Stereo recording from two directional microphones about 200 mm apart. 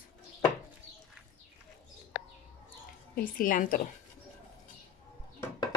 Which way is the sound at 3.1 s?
45° left (ahead or behind).